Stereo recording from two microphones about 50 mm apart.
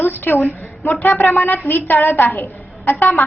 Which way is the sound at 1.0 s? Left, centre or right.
Left.